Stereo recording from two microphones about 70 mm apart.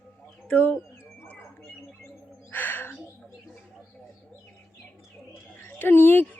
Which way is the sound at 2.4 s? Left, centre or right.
Left.